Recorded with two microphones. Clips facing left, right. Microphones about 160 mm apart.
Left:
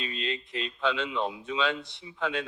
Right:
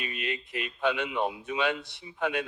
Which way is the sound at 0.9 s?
15° right (ahead or behind).